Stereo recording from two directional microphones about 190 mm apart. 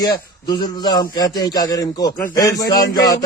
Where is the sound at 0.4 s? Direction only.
20° left (ahead or behind).